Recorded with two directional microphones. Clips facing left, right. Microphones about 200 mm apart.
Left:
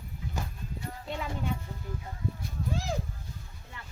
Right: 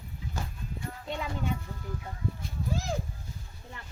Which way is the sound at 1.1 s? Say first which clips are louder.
Right 1 dB; 5° left (ahead or behind).